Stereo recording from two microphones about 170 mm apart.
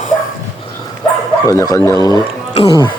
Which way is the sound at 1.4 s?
20° left (ahead or behind).